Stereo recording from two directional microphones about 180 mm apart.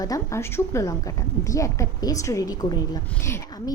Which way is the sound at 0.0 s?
15° left (ahead or behind).